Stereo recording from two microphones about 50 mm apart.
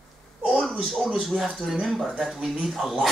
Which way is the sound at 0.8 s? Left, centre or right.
Centre.